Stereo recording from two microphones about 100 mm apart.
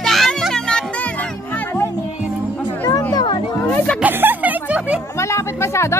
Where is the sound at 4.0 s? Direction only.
20° right (ahead or behind).